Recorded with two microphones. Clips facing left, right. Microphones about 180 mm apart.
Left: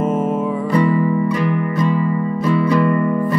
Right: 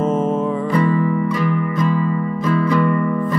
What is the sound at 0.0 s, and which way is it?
Music, 10° left (ahead or behind).